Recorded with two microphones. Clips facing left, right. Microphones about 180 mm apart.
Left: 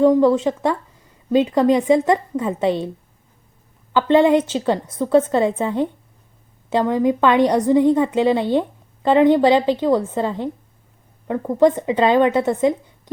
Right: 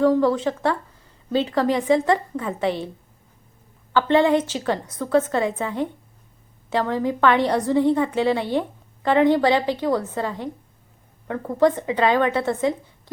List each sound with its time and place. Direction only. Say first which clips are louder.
0.0 s a woman's voice: left 4 dB; 20° left (ahead or behind)
3.9 s a woman's voice: left 3 dB; 20° left (ahead or behind)